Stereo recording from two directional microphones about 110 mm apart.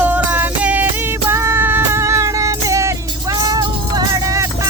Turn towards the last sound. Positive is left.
turn(degrees=-30)  # may be behind; listen again after turning